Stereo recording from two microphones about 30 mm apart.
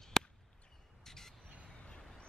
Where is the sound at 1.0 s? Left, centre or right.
Centre.